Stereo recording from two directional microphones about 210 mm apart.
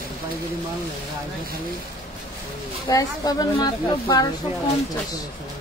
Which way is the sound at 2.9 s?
20° left (ahead or behind).